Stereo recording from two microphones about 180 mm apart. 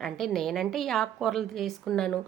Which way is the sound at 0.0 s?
Centre (ahead or behind).